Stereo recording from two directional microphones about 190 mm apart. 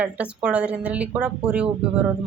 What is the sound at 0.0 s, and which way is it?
Speech, 5° right (ahead or behind).